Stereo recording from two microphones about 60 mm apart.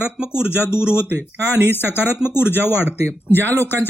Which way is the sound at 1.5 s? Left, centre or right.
Right.